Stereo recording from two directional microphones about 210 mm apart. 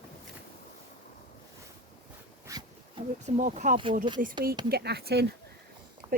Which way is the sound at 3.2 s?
35° right (ahead or behind).